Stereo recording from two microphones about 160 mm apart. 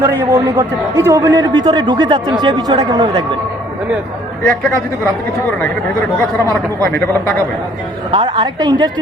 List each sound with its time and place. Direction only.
0.0 s a man's voice: 25° right (ahead or behind)
5.5 s a man's voice: 10° left (ahead or behind)
6.8 s a man's voice: 15° left (ahead or behind)
8.1 s a man's voice: 35° right (ahead or behind)